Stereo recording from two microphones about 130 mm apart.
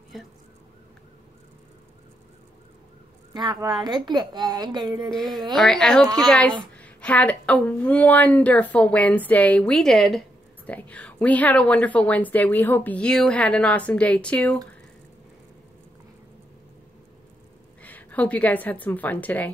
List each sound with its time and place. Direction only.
0.1 s emergency vehicle: centre (ahead or behind)
3.3 s a woman's voice: 35° right (ahead or behind)
5.1 s a woman's voice: 5° left (ahead or behind)
17.8 s a woman's voice: 10° left (ahead or behind)